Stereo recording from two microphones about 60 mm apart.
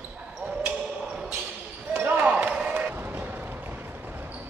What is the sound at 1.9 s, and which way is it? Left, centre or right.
Basketball bounce, right.